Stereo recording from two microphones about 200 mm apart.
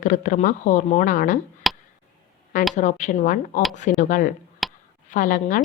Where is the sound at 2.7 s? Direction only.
35° left (ahead or behind).